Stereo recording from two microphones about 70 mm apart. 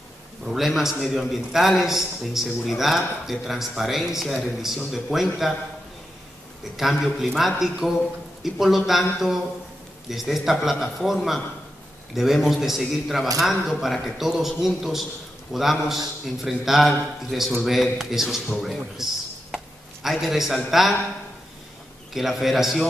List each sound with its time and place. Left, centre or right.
0.5 s speech: centre
6.8 s speech: centre
19.5 s a sound: centre
22.1 s speech: centre